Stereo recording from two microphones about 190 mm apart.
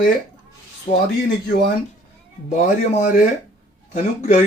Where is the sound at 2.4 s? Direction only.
40° left (ahead or behind).